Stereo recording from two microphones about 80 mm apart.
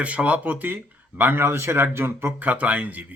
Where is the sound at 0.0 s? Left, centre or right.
Centre.